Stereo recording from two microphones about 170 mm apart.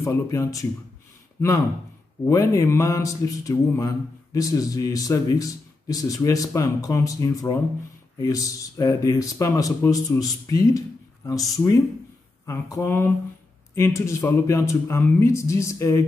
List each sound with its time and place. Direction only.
0.0 s speech: 15° left (ahead or behind)
2.2 s a sound: 20° left (ahead or behind)
12.4 s speech: 15° left (ahead or behind)